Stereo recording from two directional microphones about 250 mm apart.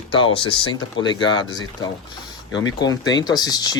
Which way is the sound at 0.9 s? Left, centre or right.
Centre.